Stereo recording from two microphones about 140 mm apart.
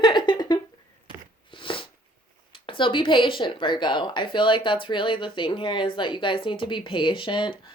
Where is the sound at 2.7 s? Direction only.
35° left (ahead or behind).